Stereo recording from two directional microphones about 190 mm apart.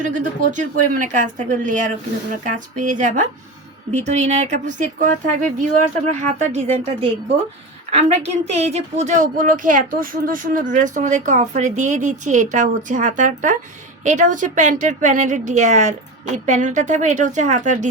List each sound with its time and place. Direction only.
0.0 s a woman's voice: 40° right (ahead or behind)